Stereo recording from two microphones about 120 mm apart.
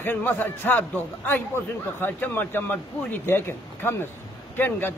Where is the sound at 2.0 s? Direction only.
15° left (ahead or behind).